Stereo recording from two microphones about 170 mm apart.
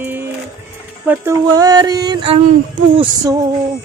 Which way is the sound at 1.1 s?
15° right (ahead or behind).